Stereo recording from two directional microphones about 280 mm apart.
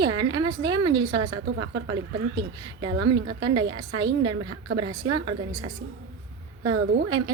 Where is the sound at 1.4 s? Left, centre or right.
Right.